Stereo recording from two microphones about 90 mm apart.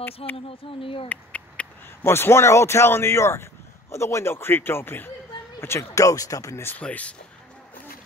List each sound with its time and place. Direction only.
0.5 s speech: 85° left
1.0 s a sound: 15° left (ahead or behind)
2.0 s speech: 25° left (ahead or behind)
6.8 s speech: 15° left (ahead or behind)